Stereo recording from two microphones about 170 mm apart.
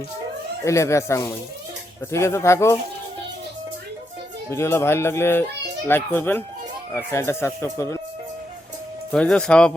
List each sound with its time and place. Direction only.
0.6 s speech: 15° left (ahead or behind)
4.4 s speech: 15° left (ahead or behind)
9.1 s speech: 5° left (ahead or behind)